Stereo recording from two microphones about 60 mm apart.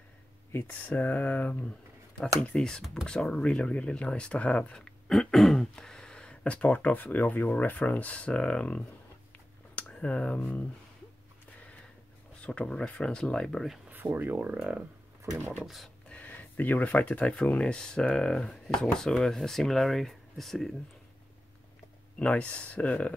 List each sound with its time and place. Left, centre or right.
0.7 s speech: left
2.5 s speech: centre
12.4 s speech: centre
13.8 s speech: right
15.6 s speech: centre
16.1 s a sound: left
17.5 s speech: centre
22.2 s speech: left